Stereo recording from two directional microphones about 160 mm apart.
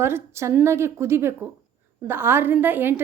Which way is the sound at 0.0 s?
15° right (ahead or behind).